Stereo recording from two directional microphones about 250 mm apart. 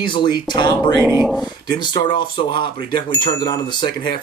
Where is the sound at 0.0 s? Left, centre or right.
Centre.